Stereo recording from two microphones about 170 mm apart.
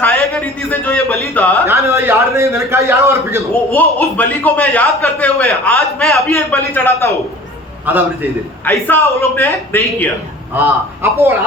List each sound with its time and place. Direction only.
0.0 s a man's voice: 10° left (ahead or behind)
1.6 s a man's voice: 15° right (ahead or behind)
3.7 s a man's voice: 10° left (ahead or behind)
8.6 s a man's voice: 10° left (ahead or behind)
10.5 s a man's voice: 10° right (ahead or behind)